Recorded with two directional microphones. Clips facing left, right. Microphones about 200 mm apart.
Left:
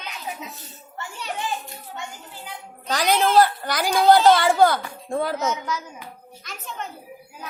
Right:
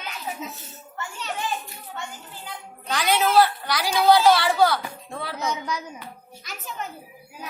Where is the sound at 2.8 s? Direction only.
40° left (ahead or behind).